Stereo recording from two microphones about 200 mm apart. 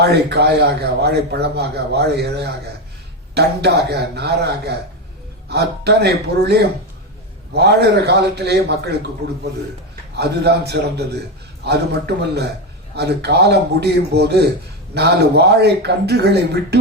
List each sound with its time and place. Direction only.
0.0 s a man's voice: 55° right (ahead or behind)